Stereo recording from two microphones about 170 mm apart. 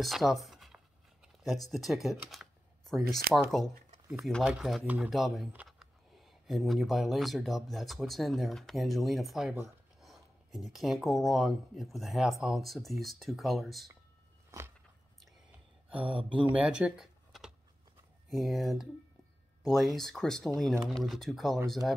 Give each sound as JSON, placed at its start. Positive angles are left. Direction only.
{"t": 0.0, "sound": "speech", "side_deg": 0}
{"t": 15.9, "sound": "speech", "side_deg": -10}